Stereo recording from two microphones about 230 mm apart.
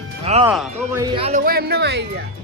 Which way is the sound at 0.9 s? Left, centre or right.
Centre.